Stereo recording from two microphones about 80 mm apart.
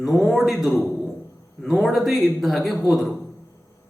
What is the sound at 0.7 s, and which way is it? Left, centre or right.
Speech, left.